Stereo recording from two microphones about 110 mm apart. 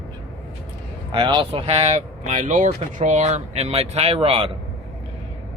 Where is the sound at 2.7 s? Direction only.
90° right; by 4.5 s 65° right (ahead or behind).